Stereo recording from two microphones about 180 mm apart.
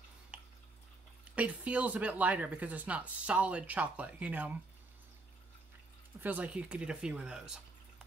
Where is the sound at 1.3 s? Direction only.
5° right (ahead or behind).